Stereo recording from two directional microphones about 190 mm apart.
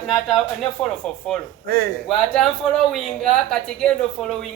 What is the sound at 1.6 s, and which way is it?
Speech, 60° right (ahead or behind).